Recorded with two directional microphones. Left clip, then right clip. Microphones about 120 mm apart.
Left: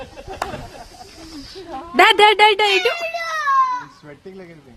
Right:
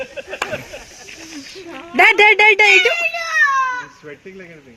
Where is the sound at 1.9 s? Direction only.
10° right (ahead or behind).